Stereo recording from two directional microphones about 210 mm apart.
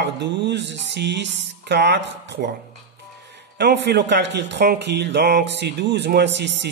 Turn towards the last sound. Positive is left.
turn(degrees=-55)  # may be behind; listen again after turning